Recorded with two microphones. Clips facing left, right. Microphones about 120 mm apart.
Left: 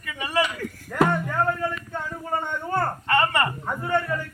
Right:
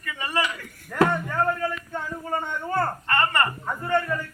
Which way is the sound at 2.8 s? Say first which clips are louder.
Left 3 dB; 15° left (ahead or behind).